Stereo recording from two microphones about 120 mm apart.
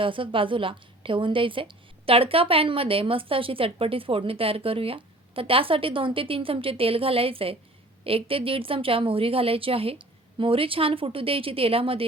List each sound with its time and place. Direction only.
0.0 s a woman's voice: 45° right (ahead or behind)